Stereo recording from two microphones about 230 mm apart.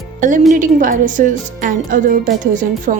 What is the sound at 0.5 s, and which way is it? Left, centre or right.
A woman's voice, right.